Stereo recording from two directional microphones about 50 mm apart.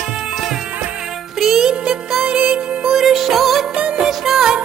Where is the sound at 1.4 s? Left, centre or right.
Centre.